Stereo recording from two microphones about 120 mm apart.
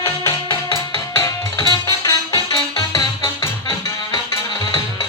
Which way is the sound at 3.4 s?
35° left (ahead or behind).